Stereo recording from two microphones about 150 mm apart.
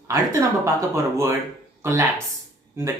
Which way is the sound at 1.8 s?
15° right (ahead or behind).